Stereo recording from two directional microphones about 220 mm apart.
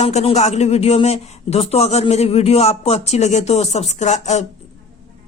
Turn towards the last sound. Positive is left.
turn(degrees=30)  # may be behind; listen again after turning